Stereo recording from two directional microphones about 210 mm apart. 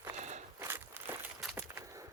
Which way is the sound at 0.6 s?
10° right (ahead or behind).